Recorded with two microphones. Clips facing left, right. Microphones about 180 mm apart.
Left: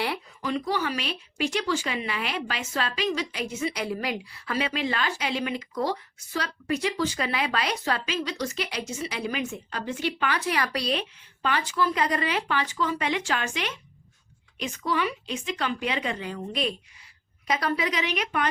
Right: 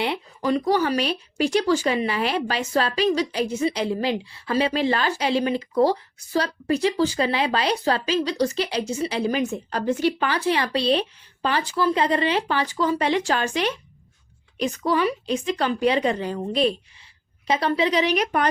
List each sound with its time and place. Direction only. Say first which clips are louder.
0.4 s speech: right 7 dB; 40° right (ahead or behind)